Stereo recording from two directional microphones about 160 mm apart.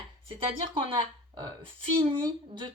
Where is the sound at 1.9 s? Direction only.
30° right (ahead or behind).